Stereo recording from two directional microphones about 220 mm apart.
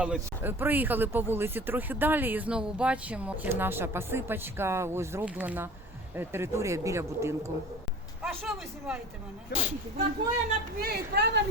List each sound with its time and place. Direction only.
0.0 s speech: 5° right (ahead or behind)
8.2 s speech: centre (ahead or behind)
9.5 s speech: 50° left (ahead or behind)
10.8 s a woman's voice: 45° right (ahead or behind)